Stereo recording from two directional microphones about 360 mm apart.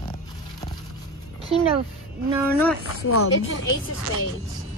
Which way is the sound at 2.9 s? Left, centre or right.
Left.